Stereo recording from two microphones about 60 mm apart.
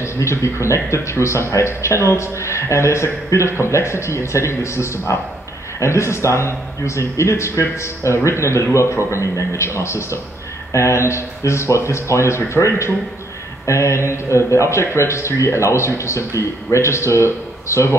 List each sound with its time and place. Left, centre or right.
0.0 s a man's voice: left